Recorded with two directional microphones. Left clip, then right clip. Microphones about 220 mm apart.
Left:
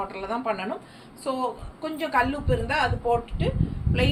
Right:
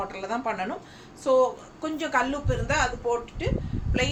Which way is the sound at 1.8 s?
15° right (ahead or behind).